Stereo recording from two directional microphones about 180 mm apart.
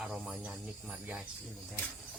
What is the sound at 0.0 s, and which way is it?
A man's voice, 5° right (ahead or behind).